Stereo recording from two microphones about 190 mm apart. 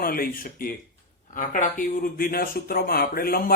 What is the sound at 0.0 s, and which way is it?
Speech, 50° left (ahead or behind).